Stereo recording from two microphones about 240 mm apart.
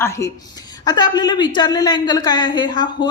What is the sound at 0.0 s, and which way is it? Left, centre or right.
A woman's voice, centre.